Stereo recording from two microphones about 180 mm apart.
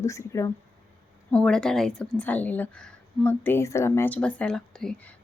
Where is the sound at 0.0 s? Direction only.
15° left (ahead or behind).